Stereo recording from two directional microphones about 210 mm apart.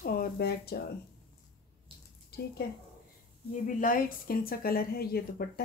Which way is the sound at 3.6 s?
40° left (ahead or behind).